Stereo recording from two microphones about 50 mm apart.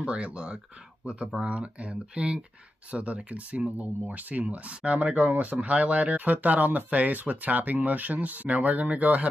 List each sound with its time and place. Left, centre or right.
0.0 s speech: right